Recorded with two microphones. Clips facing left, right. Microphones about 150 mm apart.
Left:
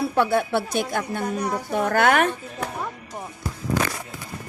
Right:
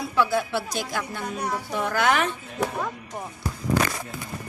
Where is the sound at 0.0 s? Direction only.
55° left (ahead or behind).